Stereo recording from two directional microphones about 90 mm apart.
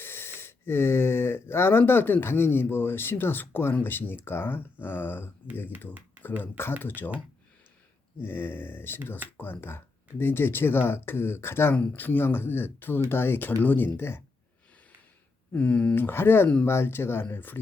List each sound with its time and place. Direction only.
0.0 s speech: 25° left (ahead or behind)
6.4 s speech: 25° left (ahead or behind)
8.2 s speech: 25° left (ahead or behind)
15.5 s speech: 15° left (ahead or behind)
16.0 s speech: 25° left (ahead or behind)